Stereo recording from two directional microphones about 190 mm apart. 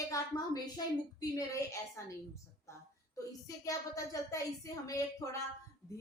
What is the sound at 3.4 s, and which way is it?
A child's voice, 15° left (ahead or behind).